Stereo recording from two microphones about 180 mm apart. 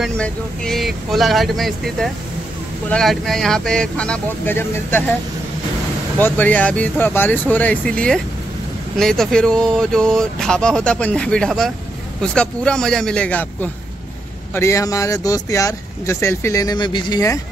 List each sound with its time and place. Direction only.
0.0 s speech: centre (ahead or behind)
6.1 s speech: 10° left (ahead or behind)